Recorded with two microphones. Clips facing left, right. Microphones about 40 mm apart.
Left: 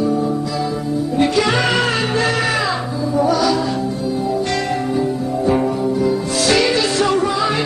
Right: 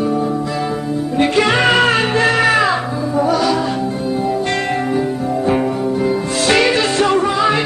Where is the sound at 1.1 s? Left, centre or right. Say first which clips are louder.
Right 2 dB; right.